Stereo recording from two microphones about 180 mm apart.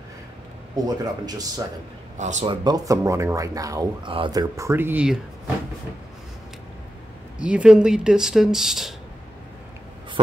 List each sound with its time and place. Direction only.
0.8 s speech: 20° right (ahead or behind)
2.1 s speech: 40° right (ahead or behind)
2.4 s speech: 20° right (ahead or behind); by 5.2 s 5° right (ahead or behind)
7.3 s speech: 5° right (ahead or behind)